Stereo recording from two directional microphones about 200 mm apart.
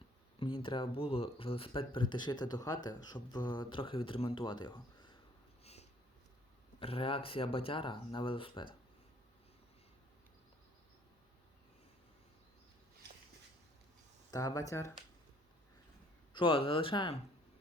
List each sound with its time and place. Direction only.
0.3 s speech: 25° left (ahead or behind)
6.7 s speech: 25° left (ahead or behind)
14.3 s speech: 20° left (ahead or behind)
16.3 s speech: 25° left (ahead or behind)